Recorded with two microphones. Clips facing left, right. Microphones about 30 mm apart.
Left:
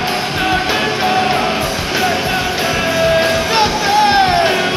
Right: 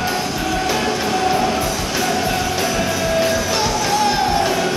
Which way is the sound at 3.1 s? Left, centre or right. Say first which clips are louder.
Left 5 dB; left.